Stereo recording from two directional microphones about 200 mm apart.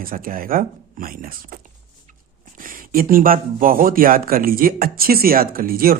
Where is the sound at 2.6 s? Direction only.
45° right (ahead or behind).